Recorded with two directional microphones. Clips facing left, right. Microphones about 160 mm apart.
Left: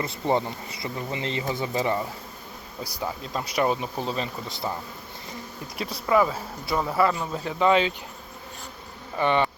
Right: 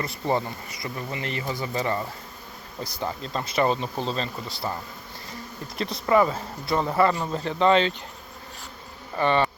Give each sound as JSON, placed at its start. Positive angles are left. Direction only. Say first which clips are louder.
{"t": 0.0, "sound": "speech", "louder": "left 1 dB", "side_deg": 20}
{"t": 5.7, "sound": "speech", "louder": "right 1 dB", "side_deg": 10}
{"t": 9.1, "sound": "bee", "louder": "right 1 dB", "side_deg": 15}